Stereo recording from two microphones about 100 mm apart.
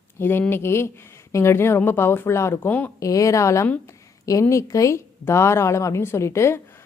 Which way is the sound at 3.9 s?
35° left (ahead or behind).